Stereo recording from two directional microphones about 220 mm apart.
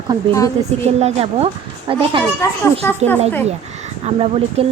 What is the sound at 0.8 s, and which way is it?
Speech, 30° right (ahead or behind).